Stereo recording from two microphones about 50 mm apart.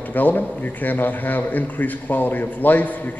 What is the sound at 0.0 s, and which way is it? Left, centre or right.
A man's voice, left.